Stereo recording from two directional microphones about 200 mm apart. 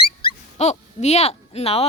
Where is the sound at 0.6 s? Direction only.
35° left (ahead or behind).